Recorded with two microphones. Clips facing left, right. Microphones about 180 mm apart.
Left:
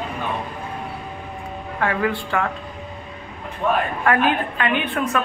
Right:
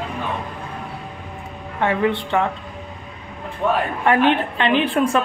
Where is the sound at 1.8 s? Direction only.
25° right (ahead or behind).